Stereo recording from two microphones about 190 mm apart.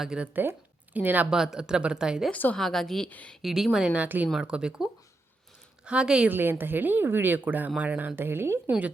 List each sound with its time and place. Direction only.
0.0 s a woman's voice: 5° right (ahead or behind)
2.3 s a woman's voice: 5° left (ahead or behind); by 8.9 s 10° right (ahead or behind)